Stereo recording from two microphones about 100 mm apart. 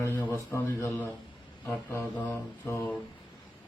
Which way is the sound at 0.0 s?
20° left (ahead or behind).